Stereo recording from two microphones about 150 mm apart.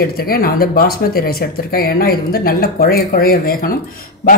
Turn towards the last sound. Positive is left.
turn(degrees=80)